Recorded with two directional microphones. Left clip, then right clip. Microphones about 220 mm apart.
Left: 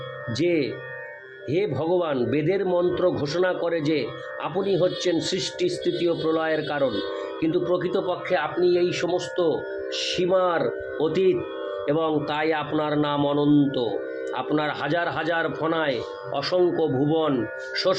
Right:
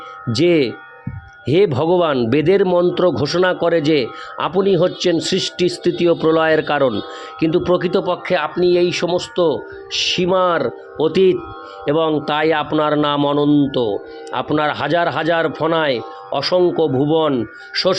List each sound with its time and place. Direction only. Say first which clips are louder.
0.3 s speech: right 9 dB; 45° right (ahead or behind)